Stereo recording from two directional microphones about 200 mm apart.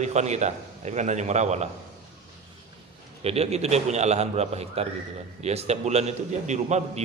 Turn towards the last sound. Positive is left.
turn(degrees=-35)  # may be behind; listen again after turning